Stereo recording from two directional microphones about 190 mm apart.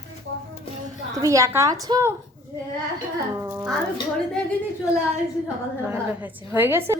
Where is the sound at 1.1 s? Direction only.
15° right (ahead or behind).